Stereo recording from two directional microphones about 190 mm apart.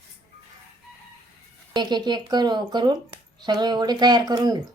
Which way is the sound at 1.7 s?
25° right (ahead or behind).